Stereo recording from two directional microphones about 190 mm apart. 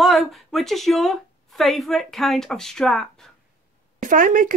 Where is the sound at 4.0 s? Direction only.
45° right (ahead or behind).